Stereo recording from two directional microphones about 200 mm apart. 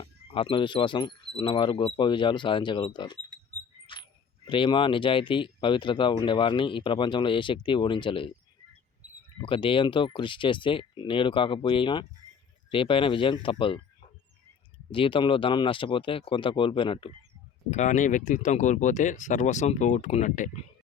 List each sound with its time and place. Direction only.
0.0 s speech: 25° left (ahead or behind)
4.4 s speech: 25° left (ahead or behind)
9.4 s speech: 25° left (ahead or behind)
14.9 s speech: 25° left (ahead or behind)
17.7 s speech: 35° left (ahead or behind)